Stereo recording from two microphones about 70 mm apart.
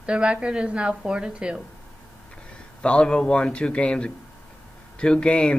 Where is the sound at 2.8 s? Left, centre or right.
Centre.